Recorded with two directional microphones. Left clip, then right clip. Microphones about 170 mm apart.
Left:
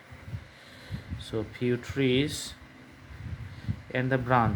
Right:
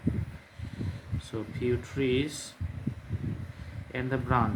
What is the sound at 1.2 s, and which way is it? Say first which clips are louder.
Speech: left 2 dB; 40° left (ahead or behind).